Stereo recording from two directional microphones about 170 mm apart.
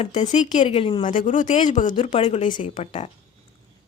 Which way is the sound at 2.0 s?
30° left (ahead or behind).